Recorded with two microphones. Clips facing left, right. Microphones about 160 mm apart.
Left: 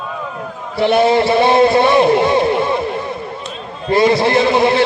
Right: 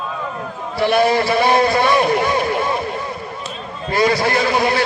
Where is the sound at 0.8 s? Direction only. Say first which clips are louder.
Left 3 dB; 25° left (ahead or behind).